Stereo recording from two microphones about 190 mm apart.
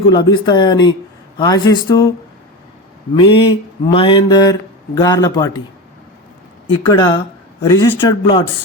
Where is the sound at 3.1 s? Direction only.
25° left (ahead or behind).